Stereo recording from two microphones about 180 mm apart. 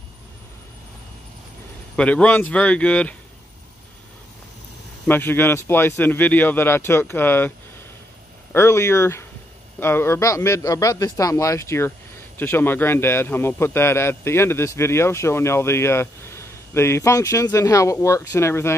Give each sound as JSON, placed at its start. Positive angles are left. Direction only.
{"t": 2.0, "sound": "a man's voice", "side_deg": 5}
{"t": 5.0, "sound": "a man's voice", "side_deg": 10}
{"t": 8.5, "sound": "a man's voice", "side_deg": 15}